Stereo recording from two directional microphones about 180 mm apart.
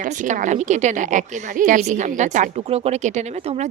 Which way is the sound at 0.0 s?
45° right (ahead or behind).